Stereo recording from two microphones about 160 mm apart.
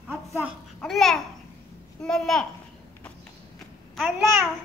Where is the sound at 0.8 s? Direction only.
5° left (ahead or behind).